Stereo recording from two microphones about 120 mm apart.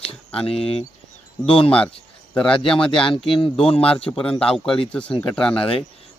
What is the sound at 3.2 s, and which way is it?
Speech, 50° left (ahead or behind).